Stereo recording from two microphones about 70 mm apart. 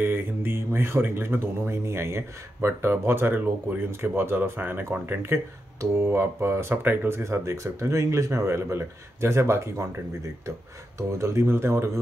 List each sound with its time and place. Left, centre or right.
0.0 s speech: right